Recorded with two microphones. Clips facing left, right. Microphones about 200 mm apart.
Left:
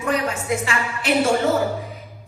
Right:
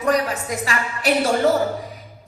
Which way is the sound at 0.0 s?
35° right (ahead or behind).